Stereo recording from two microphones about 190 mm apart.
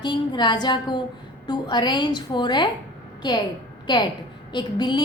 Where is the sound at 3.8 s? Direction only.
20° left (ahead or behind).